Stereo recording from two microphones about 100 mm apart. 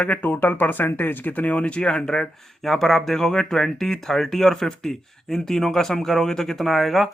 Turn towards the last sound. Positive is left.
turn(degrees=0)  # may be behind; listen again after turning